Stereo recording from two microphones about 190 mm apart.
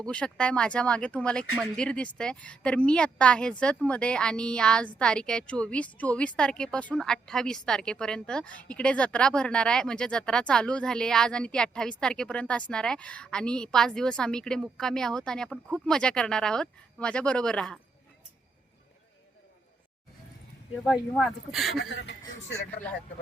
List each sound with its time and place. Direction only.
0.1 s a woman's voice: 5° left (ahead or behind)
21.1 s a woman's voice: centre (ahead or behind)
21.8 s speech: 65° left (ahead or behind)